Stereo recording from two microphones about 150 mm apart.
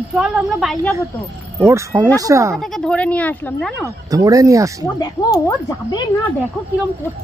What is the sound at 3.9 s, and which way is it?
Speech, 25° right (ahead or behind).